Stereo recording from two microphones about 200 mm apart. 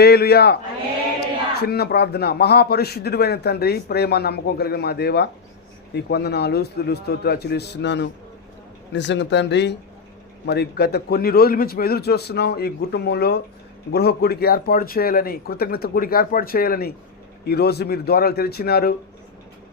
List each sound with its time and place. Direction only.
0.0 s a man's voice: 55° left (ahead or behind)